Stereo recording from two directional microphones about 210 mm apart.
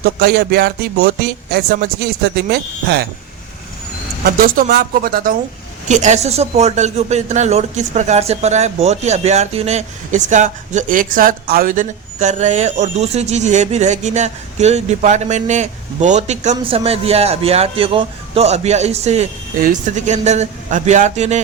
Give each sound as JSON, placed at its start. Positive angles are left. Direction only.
{"t": 0.0, "sound": "speech", "side_deg": -50}
{"t": 4.2, "sound": "speech", "side_deg": -45}